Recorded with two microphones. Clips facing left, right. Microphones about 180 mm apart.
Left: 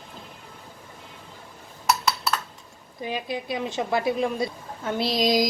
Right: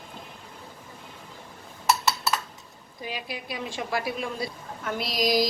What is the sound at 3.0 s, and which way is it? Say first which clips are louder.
A woman's voice: left 6 dB; 20° left (ahead or behind).